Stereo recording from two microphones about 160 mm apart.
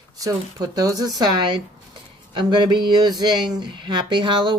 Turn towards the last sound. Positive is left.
turn(degrees=-30)  # may be behind; listen again after turning